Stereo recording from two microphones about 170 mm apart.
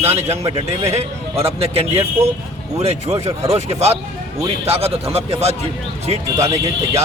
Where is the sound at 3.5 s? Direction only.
40° right (ahead or behind).